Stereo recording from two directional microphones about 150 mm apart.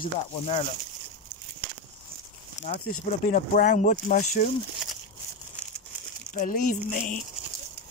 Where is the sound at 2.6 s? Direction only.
50° left (ahead or behind).